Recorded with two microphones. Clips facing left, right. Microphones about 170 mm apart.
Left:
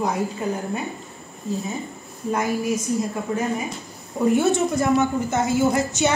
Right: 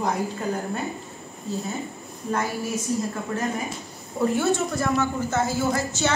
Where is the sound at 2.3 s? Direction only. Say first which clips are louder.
Left 4 dB; 15° left (ahead or behind).